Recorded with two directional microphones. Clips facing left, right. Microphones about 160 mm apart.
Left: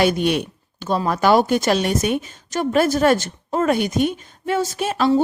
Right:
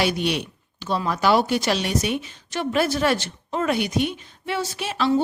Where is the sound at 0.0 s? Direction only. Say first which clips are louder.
Left 5 dB; 50° left (ahead or behind).